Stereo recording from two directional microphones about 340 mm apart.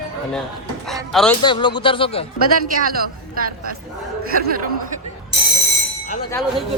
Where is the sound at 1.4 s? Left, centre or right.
Centre.